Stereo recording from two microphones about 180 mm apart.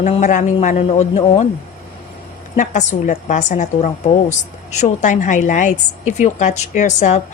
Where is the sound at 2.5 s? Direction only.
45° left (ahead or behind).